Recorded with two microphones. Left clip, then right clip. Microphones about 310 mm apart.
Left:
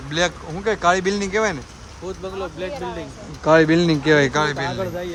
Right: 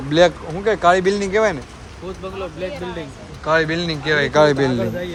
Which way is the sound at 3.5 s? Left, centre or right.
Left.